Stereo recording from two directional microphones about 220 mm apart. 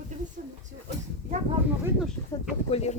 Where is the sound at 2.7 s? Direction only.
30° left (ahead or behind).